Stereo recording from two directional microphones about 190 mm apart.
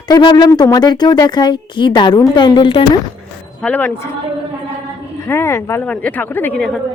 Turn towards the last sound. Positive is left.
turn(degrees=5)  # may be behind; listen again after turning